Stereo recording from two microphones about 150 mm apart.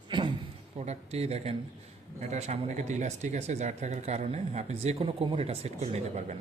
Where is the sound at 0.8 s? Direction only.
45° right (ahead or behind).